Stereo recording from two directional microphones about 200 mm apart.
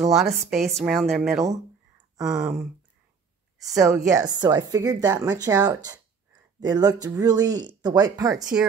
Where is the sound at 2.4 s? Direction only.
10° right (ahead or behind).